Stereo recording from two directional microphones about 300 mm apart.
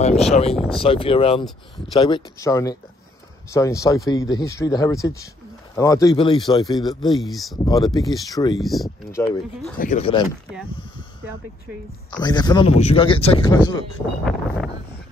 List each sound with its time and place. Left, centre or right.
0.0 s speech: left
7.2 s speech: centre
7.5 s speech: centre
8.5 s speech: centre
9.2 s speech: centre
9.8 s speech: left
12.1 s speech: centre